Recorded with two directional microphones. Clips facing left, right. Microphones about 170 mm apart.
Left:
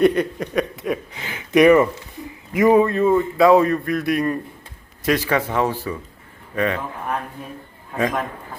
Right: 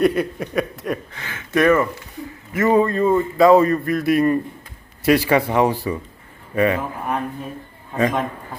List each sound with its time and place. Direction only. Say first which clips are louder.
0.0 s a man's voice: left 1 dB; 5° right (ahead or behind)
1.1 s a man's voice: left 6 dB; 20° left (ahead or behind); by 8.2 s centre (ahead or behind)